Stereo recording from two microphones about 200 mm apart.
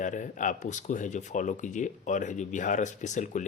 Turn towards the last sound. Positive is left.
turn(degrees=40)  # may be behind; listen again after turning